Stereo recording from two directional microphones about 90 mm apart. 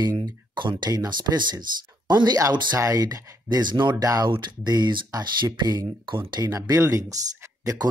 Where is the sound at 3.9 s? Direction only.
40° right (ahead or behind).